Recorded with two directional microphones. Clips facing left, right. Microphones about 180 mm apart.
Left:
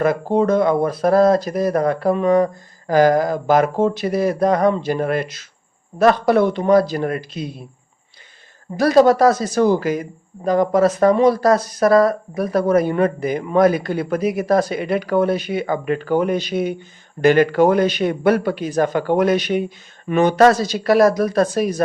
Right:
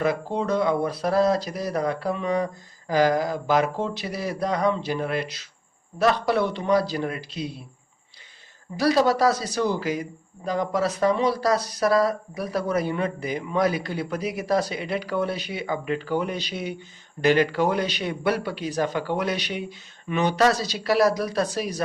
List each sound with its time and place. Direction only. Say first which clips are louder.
0.0 s a man's voice: left 8 dB; 50° left (ahead or behind)
8.7 s a man's voice: left 7 dB; 50° left (ahead or behind)